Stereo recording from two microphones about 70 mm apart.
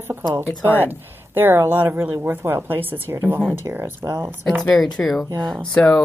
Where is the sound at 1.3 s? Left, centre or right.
Right.